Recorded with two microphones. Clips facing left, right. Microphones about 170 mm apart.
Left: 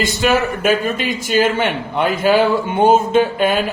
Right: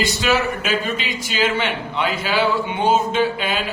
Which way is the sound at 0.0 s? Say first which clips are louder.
Left 3 dB; 50° left (ahead or behind).